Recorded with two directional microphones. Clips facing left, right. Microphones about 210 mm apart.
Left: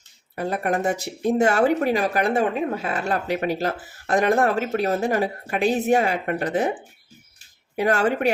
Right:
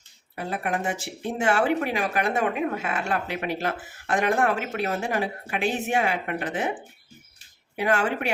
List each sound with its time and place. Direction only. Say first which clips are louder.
0.3 s speech: left 5 dB; 40° left (ahead or behind)
7.8 s speech: left 4 dB; 40° left (ahead or behind)